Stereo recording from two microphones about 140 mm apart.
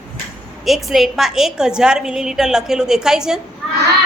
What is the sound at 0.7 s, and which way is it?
A woman's voice, centre (ahead or behind).